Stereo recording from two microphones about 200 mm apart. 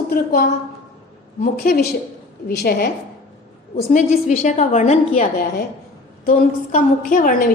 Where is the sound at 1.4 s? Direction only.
50° left (ahead or behind).